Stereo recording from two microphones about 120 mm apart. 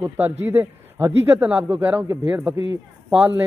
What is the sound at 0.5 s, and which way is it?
A man's voice, 15° right (ahead or behind).